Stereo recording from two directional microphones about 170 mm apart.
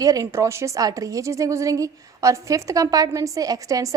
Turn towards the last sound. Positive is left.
turn(degrees=-20)  # may be behind; listen again after turning